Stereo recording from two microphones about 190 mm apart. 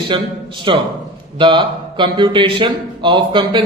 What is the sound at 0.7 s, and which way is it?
Speech, 25° right (ahead or behind).